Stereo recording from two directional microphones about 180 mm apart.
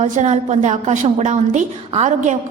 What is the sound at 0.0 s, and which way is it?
A woman's voice, 40° right (ahead or behind).